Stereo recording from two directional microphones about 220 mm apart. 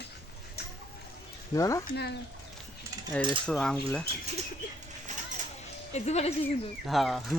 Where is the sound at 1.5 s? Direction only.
15° left (ahead or behind).